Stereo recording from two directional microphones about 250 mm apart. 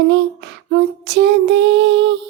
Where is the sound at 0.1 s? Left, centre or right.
Right.